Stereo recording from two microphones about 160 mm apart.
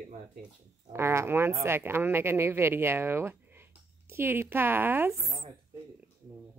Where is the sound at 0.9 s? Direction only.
15° right (ahead or behind).